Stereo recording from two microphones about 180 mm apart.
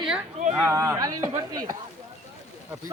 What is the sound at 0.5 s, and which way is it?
Speech, 15° right (ahead or behind).